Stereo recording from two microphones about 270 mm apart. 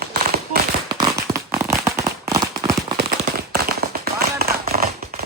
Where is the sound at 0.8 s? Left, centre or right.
Centre.